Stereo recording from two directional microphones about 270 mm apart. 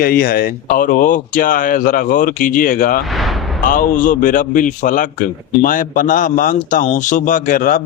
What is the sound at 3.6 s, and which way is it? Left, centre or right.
A man's voice, left.